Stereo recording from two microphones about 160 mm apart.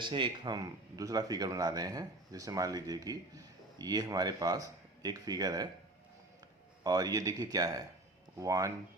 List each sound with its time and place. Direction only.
0.0 s speech: 30° right (ahead or behind)
6.8 s speech: 25° right (ahead or behind)